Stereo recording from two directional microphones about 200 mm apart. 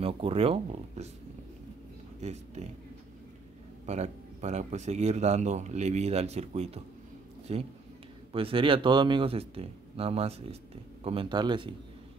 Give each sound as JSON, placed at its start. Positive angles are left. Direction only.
{"t": 0.0, "sound": "speech", "side_deg": -30}
{"t": 2.1, "sound": "speech", "side_deg": -35}
{"t": 3.8, "sound": "speech", "side_deg": -35}